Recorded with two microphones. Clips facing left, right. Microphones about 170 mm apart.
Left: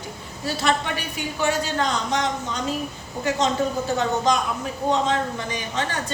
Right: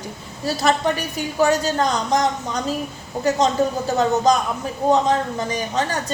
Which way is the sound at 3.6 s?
40° right (ahead or behind).